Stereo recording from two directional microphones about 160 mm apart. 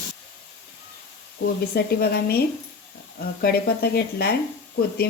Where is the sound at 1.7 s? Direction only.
80° left.